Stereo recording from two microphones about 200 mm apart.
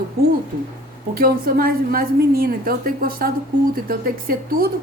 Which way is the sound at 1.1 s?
45° right (ahead or behind).